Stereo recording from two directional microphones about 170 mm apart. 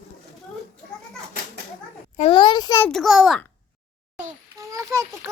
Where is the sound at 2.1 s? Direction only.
35° left (ahead or behind).